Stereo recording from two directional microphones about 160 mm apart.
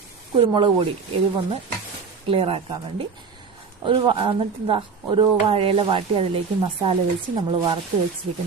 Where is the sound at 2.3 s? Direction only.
35° right (ahead or behind).